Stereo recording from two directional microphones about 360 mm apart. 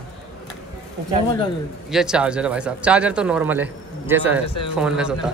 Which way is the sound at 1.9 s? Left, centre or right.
Centre.